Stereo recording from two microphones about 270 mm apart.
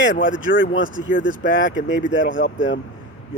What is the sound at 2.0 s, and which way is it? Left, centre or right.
Speech, left.